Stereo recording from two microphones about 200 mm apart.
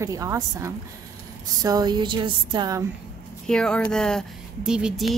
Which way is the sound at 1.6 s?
20° right (ahead or behind).